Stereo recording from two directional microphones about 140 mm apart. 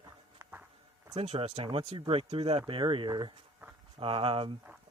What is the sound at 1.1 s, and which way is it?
Speech, 50° right (ahead or behind).